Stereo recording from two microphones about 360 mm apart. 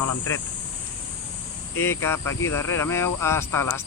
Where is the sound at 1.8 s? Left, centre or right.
Centre.